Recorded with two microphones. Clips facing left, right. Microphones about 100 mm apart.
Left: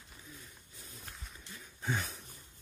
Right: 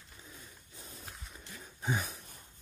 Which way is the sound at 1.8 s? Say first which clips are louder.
Right 2 dB; 15° right (ahead or behind).